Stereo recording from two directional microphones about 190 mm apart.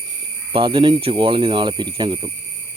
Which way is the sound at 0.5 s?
25° right (ahead or behind).